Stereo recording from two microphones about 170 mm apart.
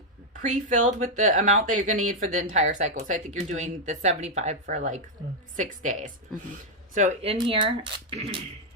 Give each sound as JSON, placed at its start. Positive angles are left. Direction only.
{"t": 0.4, "sound": "speech", "side_deg": -45}